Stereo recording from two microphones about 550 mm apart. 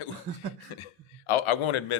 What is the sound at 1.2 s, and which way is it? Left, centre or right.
Speech, left.